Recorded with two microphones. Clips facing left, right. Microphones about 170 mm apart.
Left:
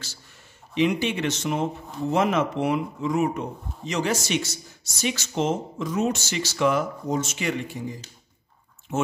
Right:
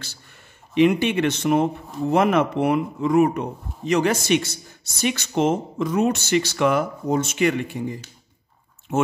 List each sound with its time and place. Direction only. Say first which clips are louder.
0.7 s speech: right 5 dB; 60° right (ahead or behind)